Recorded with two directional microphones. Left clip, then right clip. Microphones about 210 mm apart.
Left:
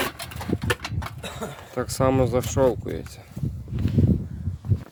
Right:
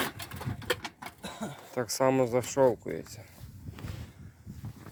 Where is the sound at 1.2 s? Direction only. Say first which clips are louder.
Left 6 dB; 5° right (ahead or behind).